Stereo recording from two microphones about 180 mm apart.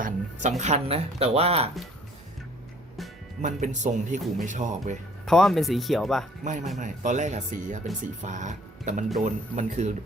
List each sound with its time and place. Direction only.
0.0 s speech: 40° right (ahead or behind)
3.4 s speech: 45° right (ahead or behind)
5.2 s speech: centre (ahead or behind)
6.4 s speech: 45° right (ahead or behind)